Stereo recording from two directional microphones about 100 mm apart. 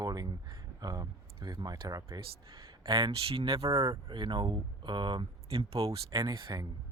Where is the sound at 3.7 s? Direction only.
40° right (ahead or behind); by 5.8 s 70° right (ahead or behind).